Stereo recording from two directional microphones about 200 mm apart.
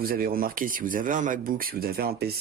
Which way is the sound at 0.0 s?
45° right (ahead or behind).